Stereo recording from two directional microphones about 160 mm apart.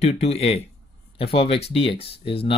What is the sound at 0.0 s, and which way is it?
Speech, 40° left (ahead or behind).